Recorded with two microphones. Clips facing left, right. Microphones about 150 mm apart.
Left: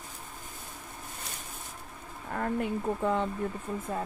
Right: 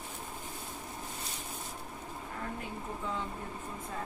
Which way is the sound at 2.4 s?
60° left (ahead or behind).